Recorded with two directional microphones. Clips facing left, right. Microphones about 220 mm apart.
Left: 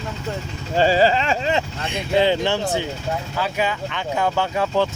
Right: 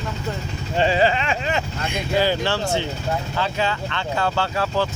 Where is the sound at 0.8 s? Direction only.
35° left (ahead or behind).